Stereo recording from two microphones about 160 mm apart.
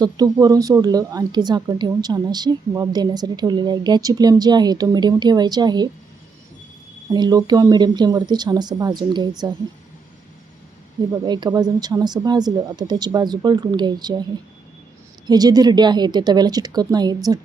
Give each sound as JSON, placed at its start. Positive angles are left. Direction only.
{"t": 0.0, "sound": "a woman's voice", "side_deg": -25}
{"t": 7.1, "sound": "a woman's voice", "side_deg": -25}
{"t": 11.1, "sound": "a woman's voice", "side_deg": -25}
{"t": 15.3, "sound": "a woman's voice", "side_deg": -25}